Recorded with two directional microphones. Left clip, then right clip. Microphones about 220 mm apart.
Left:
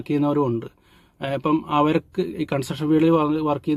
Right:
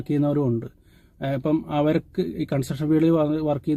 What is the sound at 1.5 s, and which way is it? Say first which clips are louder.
Speech: left 3 dB; 35° left (ahead or behind).